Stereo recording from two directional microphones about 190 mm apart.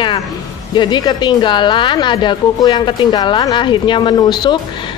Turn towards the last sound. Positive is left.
turn(degrees=25)  # may be behind; listen again after turning